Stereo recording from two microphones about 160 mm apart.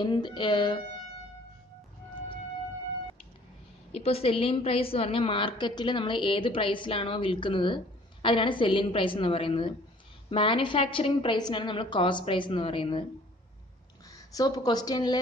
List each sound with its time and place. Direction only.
0.0 s speech: 30° left (ahead or behind)
3.9 s a woman's voice: 40° left (ahead or behind)
14.1 s a woman's voice: 25° left (ahead or behind)